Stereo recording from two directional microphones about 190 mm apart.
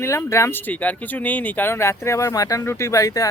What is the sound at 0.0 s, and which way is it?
Speech, 15° left (ahead or behind).